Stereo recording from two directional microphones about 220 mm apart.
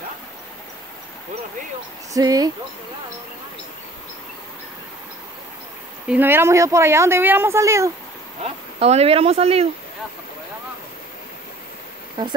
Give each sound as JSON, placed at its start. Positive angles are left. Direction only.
{"t": 2.1, "sound": "speech", "side_deg": -15}
{"t": 6.0, "sound": "speech", "side_deg": -10}
{"t": 8.5, "sound": "speech", "side_deg": -30}